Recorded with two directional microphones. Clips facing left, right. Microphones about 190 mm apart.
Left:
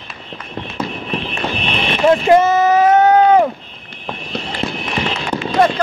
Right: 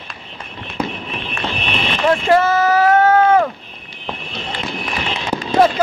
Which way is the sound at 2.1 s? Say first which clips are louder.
Left 3 dB; 20° left (ahead or behind).